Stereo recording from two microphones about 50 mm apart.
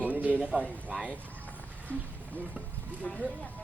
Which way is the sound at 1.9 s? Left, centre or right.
Left.